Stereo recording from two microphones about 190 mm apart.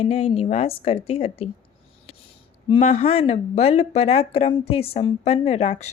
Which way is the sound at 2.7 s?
30° left (ahead or behind).